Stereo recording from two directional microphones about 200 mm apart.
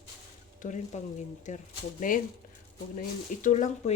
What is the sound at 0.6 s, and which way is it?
Speech, 35° left (ahead or behind).